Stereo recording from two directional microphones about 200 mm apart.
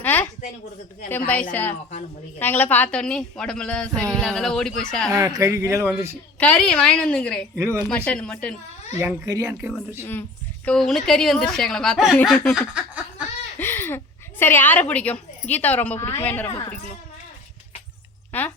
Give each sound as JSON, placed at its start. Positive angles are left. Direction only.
{"t": 0.0, "sound": "a sound", "side_deg": 10}
{"t": 2.4, "sound": "a woman's voice", "side_deg": 10}
{"t": 5.1, "sound": "speech", "side_deg": -15}
{"t": 6.4, "sound": "a woman's voice", "side_deg": 5}
{"t": 7.5, "sound": "speech", "side_deg": -10}
{"t": 7.9, "sound": "a woman's voice", "side_deg": 5}
{"t": 9.0, "sound": "speech", "side_deg": -15}
{"t": 10.0, "sound": "a woman's voice", "side_deg": 10}
{"t": 12.7, "sound": "a sound", "side_deg": -5}
{"t": 13.6, "sound": "a woman's voice", "side_deg": 10}
{"t": 18.3, "sound": "speech", "side_deg": 10}